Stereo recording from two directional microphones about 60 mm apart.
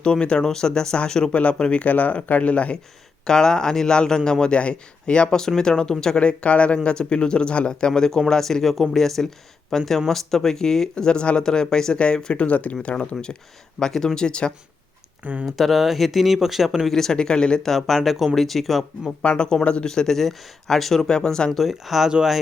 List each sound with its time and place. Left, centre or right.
0.0 s a man's voice: centre
3.2 s a man's voice: centre
15.2 s speech: right
15.4 s speech: centre
16.9 s a man's voice: centre
17.7 s speech: centre
19.2 s a man's voice: centre
21.6 s speech: centre